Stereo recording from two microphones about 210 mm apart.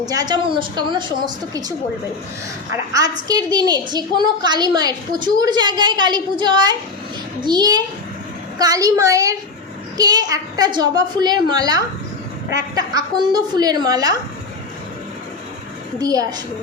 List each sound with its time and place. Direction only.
0.0 s a woman's voice: 20° right (ahead or behind)
2.9 s a woman's voice: 15° right (ahead or behind)
16.0 s a woman's voice: 15° right (ahead or behind)